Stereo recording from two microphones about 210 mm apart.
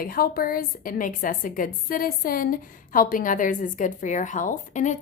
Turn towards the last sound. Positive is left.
turn(degrees=35)  # may be behind; listen again after turning